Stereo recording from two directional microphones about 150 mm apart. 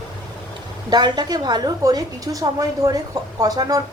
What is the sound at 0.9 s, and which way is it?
A woman's voice, 30° right (ahead or behind).